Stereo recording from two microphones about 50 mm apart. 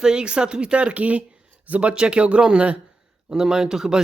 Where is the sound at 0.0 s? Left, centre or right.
Centre.